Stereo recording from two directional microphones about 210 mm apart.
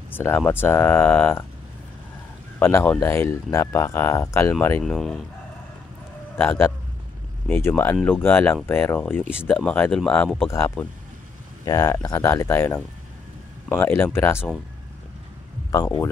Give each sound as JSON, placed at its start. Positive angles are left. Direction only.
{"t": 0.1, "sound": "speech", "side_deg": 10}
{"t": 2.6, "sound": "speech", "side_deg": 10}
{"t": 6.3, "sound": "speech", "side_deg": 10}
{"t": 11.6, "sound": "speech", "side_deg": 15}
{"t": 15.7, "sound": "speech", "side_deg": 15}